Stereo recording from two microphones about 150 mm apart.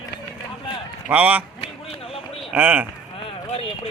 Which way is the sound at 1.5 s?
40° left (ahead or behind).